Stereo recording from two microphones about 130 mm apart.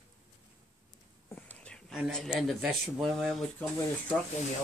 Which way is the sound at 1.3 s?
10° left (ahead or behind).